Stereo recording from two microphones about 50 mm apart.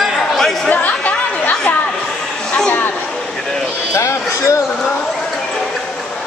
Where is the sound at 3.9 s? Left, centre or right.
Left.